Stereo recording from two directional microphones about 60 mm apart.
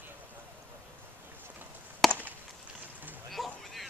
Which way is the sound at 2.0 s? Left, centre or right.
Centre.